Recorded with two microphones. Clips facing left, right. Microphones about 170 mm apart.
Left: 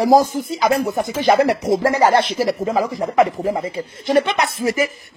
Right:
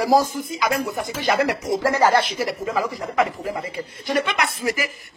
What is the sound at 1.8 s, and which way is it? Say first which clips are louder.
Speech: left 2 dB; 20° left (ahead or behind).